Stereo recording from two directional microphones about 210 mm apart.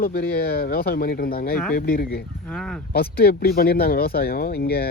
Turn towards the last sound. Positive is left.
turn(degrees=50)  # may be behind; listen again after turning